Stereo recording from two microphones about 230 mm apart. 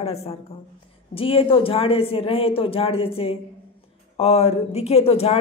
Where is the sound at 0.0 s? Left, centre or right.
Left.